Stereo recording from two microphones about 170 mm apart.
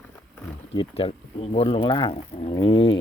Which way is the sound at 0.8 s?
35° left (ahead or behind).